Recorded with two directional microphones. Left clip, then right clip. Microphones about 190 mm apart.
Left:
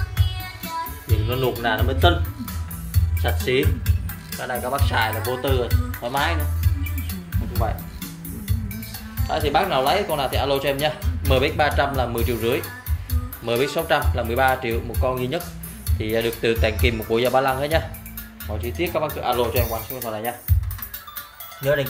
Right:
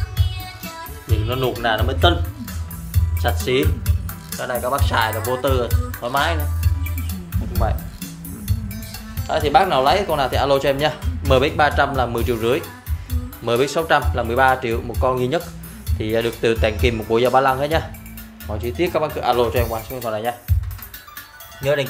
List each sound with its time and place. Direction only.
1.2 s speech: 15° right (ahead or behind)
3.2 s speech: 15° right (ahead or behind)
3.6 s music: 45° right (ahead or behind)
4.4 s speech: 15° right (ahead or behind)
9.3 s speech: 25° right (ahead or behind)
16.0 s speech: 15° right (ahead or behind)
18.6 s speech: 30° right (ahead or behind)